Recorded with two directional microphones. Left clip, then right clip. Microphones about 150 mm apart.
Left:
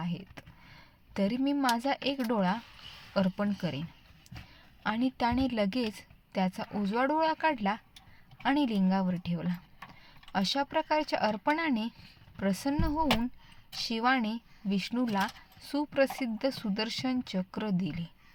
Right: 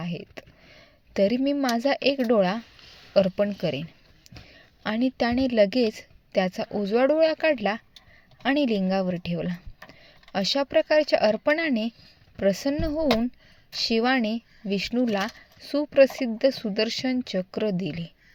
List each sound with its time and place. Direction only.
0.0 s a woman's voice: 25° right (ahead or behind)